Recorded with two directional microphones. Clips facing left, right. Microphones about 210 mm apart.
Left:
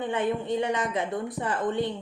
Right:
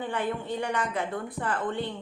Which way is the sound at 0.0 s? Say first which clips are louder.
Left 3 dB; 20° left (ahead or behind).